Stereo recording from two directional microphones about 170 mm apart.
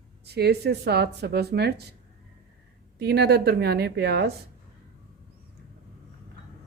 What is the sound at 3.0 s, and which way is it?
Speech, 70° right (ahead or behind).